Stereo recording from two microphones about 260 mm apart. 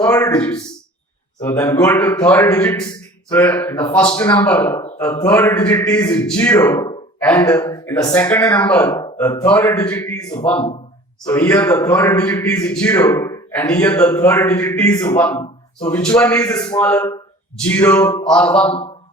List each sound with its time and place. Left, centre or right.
0.0 s a man's voice: centre